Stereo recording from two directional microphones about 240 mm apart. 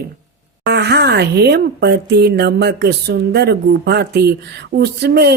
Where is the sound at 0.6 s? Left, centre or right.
Right.